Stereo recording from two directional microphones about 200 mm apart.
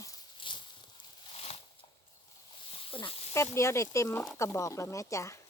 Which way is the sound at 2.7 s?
25° left (ahead or behind).